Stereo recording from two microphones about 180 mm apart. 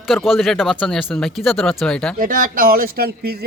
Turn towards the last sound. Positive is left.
turn(degrees=-60)  # may be behind; listen again after turning